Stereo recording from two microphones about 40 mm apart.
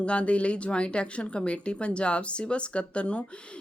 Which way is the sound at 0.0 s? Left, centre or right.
Left.